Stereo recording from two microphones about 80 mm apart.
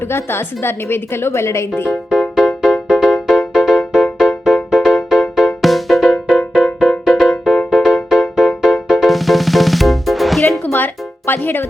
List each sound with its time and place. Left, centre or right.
0.0 s a woman's voice: left
2.0 s music: centre
10.7 s speech: left